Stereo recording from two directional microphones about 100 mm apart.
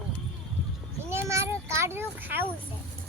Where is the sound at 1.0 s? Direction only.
25° right (ahead or behind).